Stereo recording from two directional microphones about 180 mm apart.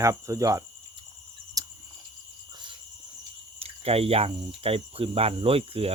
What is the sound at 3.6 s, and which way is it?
Speech, 35° right (ahead or behind).